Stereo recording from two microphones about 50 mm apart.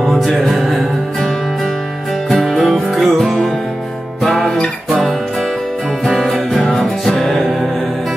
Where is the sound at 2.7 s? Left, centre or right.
Centre.